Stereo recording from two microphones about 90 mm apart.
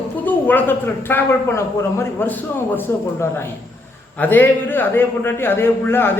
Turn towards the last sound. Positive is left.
turn(degrees=25)  # may be behind; listen again after turning